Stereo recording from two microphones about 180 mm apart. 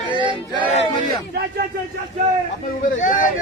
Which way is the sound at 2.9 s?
45° left (ahead or behind).